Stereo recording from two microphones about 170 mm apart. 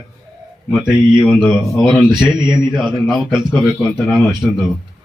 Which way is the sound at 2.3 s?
25° right (ahead or behind).